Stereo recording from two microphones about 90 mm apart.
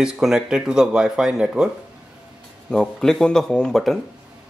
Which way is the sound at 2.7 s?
5° left (ahead or behind).